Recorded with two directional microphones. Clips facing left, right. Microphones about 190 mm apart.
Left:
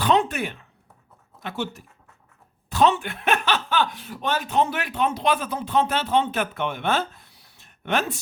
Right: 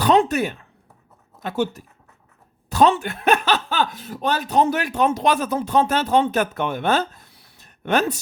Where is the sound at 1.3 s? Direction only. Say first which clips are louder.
Right 7 dB; 45° right (ahead or behind).